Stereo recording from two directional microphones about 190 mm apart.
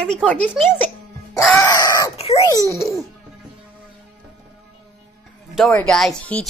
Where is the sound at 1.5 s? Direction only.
15° left (ahead or behind).